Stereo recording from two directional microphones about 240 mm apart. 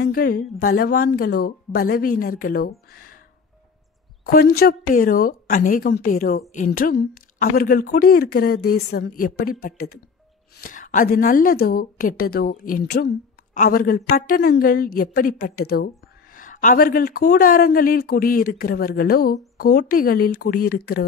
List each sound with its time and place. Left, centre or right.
0.0 s speech: left
4.6 s speech: left